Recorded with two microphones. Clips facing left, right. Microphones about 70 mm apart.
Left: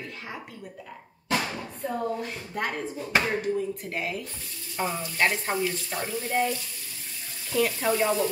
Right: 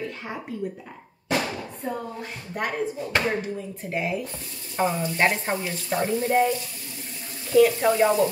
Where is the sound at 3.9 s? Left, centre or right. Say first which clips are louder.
Right 5 dB; centre.